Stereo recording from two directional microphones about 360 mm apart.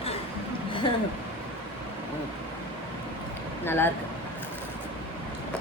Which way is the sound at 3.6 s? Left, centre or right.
Centre.